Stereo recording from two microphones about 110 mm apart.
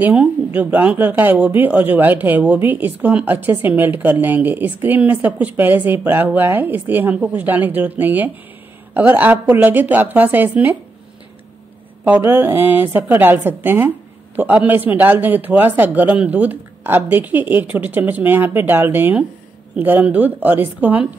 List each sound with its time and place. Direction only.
0.0 s speech: 10° right (ahead or behind)
12.0 s speech: 15° right (ahead or behind)